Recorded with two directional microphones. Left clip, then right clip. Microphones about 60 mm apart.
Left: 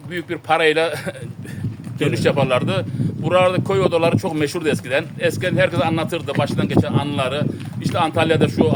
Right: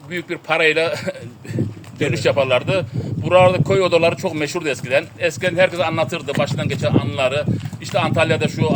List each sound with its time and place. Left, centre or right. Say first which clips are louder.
0.1 s speech: left 1 dB; left
2.0 s speech: right 1 dB; left